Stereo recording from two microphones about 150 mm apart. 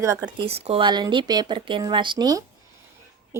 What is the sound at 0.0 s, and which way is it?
Speech, 20° right (ahead or behind).